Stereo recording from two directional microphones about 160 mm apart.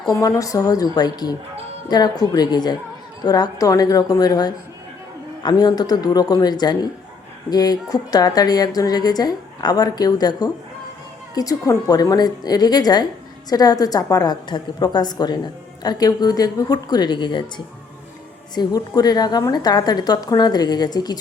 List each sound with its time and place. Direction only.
0.0 s a woman's voice: 25° left (ahead or behind)
18.5 s a woman's voice: 25° left (ahead or behind)